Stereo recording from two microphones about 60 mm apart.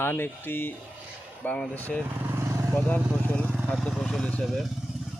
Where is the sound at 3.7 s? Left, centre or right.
Centre.